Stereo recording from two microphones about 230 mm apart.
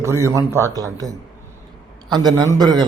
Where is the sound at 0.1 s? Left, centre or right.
Centre.